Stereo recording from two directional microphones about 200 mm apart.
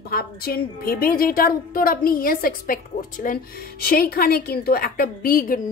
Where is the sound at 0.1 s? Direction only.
50° left (ahead or behind).